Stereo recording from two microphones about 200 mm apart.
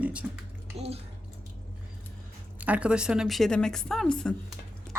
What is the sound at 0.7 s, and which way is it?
Speech, 30° right (ahead or behind).